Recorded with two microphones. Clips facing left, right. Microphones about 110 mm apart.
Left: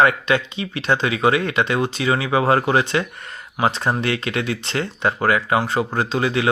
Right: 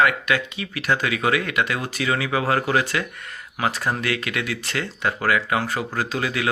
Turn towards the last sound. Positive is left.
turn(degrees=30)  # may be behind; listen again after turning